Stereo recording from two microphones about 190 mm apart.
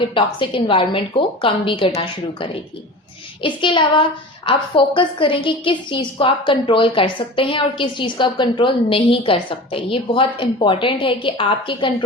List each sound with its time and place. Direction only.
0.1 s a woman's voice: 25° left (ahead or behind)